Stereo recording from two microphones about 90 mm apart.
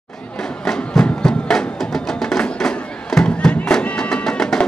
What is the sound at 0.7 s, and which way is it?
Music, 5° left (ahead or behind).